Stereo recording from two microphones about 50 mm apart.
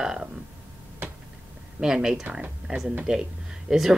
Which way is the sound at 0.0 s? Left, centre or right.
Centre.